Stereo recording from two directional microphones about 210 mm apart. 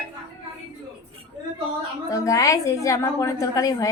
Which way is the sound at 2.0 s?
15° left (ahead or behind).